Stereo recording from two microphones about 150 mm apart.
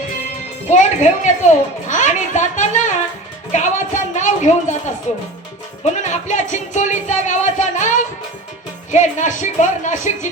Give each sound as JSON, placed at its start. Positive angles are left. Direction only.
{"t": 0.7, "sound": "a woman's voice", "side_deg": 55}